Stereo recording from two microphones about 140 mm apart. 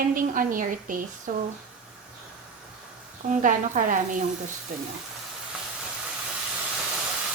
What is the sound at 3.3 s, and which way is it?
Speech, 70° right (ahead or behind).